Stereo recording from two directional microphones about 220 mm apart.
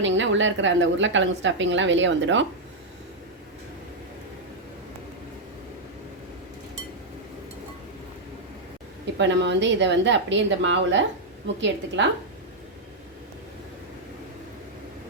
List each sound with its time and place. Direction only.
0.0 s a woman's voice: 55° right (ahead or behind)
9.1 s a woman's voice: 55° right (ahead or behind)